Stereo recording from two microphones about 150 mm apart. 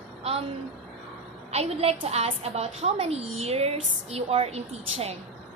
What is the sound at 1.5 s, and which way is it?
A woman's voice, 45° right (ahead or behind).